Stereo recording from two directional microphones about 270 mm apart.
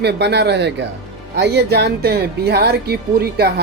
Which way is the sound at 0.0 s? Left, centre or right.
Right.